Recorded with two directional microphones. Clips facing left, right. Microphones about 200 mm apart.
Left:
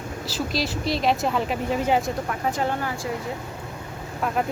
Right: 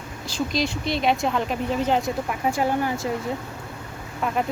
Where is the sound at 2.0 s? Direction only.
10° right (ahead or behind).